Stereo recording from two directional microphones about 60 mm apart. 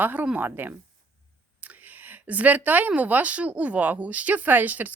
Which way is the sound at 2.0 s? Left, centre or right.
Right.